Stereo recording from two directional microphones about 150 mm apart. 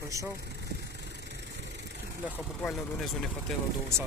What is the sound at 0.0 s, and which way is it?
Speech, 20° right (ahead or behind).